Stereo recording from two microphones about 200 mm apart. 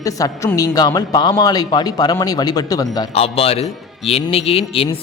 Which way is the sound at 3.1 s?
30° left (ahead or behind).